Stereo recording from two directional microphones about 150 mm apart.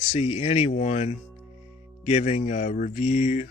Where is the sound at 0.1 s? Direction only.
40° left (ahead or behind).